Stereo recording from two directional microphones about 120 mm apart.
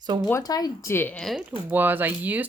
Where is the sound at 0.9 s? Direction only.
15° left (ahead or behind).